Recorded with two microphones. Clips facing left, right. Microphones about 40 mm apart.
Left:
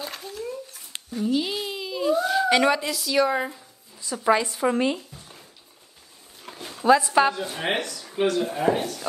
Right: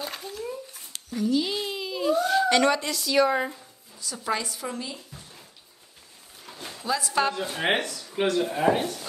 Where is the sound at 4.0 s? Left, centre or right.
Left.